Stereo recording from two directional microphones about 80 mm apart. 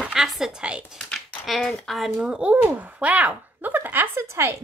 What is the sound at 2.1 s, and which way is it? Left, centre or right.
A woman's voice, centre.